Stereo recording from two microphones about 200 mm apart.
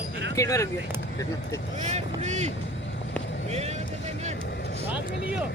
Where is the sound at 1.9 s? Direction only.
35° right (ahead or behind).